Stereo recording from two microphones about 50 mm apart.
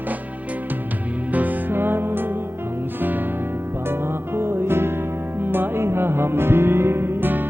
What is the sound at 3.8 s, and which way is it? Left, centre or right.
Music, right.